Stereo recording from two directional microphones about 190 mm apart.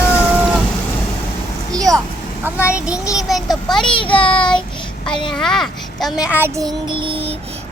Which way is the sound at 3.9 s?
25° left (ahead or behind).